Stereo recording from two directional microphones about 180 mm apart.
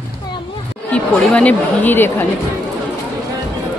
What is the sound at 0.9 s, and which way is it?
Speech, 5° left (ahead or behind).